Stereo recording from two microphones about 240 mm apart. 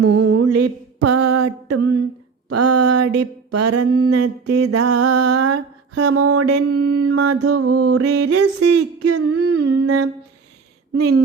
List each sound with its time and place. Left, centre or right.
0.0 s music: right
1.3 s a sound: right
10.9 s speech: right